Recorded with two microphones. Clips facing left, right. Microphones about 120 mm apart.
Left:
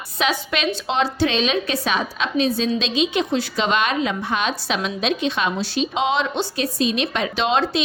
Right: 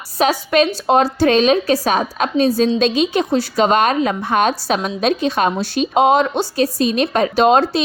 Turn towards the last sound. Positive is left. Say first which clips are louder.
# right 7 dB
turn(degrees=-45)  # may be behind; listen again after turning